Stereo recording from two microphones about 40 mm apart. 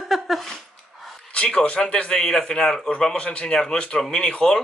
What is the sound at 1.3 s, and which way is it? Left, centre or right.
Speech, left.